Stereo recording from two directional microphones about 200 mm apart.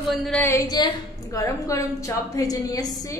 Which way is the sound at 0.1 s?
5° left (ahead or behind).